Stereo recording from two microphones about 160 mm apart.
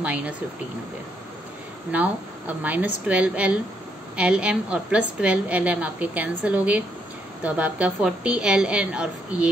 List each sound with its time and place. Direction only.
0.0 s a woman's voice: 10° right (ahead or behind)
1.9 s a woman's voice: 10° right (ahead or behind)